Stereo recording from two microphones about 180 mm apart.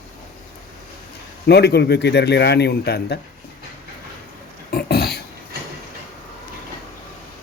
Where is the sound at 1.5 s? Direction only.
65° left (ahead or behind).